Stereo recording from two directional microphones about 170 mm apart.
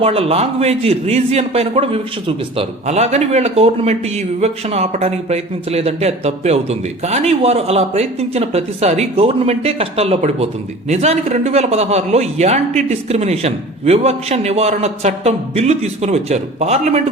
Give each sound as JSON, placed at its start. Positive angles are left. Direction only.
{"t": 0.0, "sound": "a man's voice", "side_deg": -35}